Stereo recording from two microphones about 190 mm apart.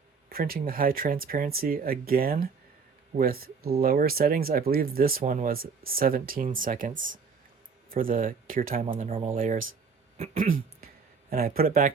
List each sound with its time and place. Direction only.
0.3 s speech: 50° right (ahead or behind)
8.8 s speech: 35° right (ahead or behind)
9.3 s speech: 45° right (ahead or behind)